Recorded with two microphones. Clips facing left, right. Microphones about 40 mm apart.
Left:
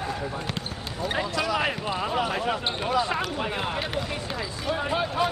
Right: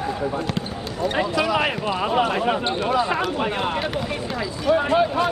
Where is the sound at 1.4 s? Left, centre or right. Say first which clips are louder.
Right 5 dB; right.